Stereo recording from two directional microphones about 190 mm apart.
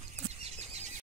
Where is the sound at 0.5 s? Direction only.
35° right (ahead or behind).